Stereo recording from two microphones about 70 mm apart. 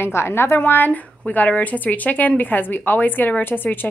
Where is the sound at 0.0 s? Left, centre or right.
Left.